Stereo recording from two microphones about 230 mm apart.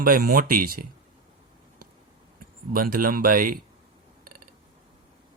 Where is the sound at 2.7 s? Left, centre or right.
Right.